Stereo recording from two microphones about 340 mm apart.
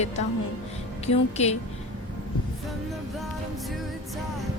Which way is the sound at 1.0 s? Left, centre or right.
Centre.